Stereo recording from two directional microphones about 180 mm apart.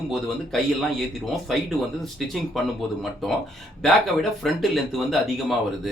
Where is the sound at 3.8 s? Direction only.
Centre (ahead or behind).